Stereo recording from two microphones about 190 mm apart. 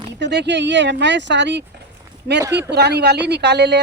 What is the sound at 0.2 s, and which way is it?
Speech, 65° right (ahead or behind).